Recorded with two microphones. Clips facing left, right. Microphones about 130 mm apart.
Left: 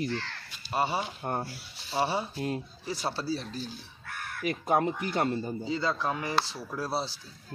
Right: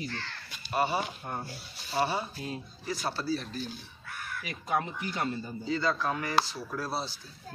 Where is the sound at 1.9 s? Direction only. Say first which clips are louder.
Left 1 dB; 25° left (ahead or behind).